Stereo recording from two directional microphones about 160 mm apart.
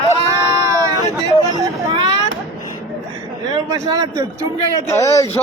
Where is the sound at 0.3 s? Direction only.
20° right (ahead or behind).